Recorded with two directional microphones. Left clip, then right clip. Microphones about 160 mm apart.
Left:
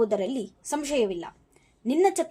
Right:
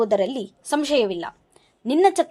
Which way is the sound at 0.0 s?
30° right (ahead or behind).